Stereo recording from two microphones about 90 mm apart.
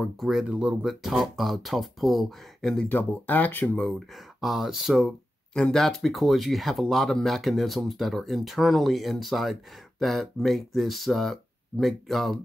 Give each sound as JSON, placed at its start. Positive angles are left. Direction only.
{"t": 0.2, "sound": "speech", "side_deg": -5}
{"t": 2.9, "sound": "speech", "side_deg": 20}
{"t": 3.9, "sound": "speech", "side_deg": 0}